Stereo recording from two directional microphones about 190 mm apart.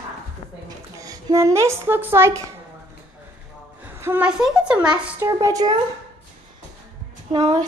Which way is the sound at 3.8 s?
10° right (ahead or behind).